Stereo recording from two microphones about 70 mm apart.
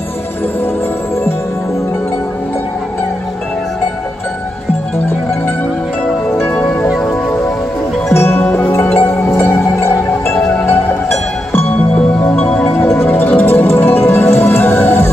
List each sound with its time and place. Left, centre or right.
6.4 s music: centre
8.1 s music: left
9.6 s music: left
10.4 s music: left